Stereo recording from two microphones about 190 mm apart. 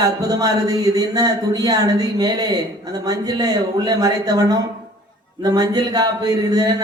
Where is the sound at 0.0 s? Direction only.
20° right (ahead or behind).